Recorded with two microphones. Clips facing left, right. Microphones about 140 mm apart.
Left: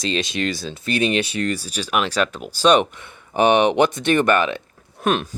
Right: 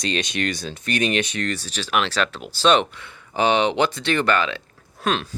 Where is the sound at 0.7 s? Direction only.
30° left (ahead or behind).